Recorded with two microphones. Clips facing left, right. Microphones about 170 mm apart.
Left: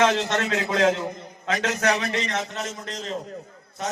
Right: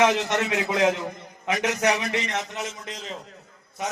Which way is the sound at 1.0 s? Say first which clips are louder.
Left 2 dB; 20° left (ahead or behind).